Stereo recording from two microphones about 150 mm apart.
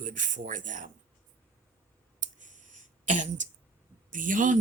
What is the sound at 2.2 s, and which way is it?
Clicking, 55° right (ahead or behind).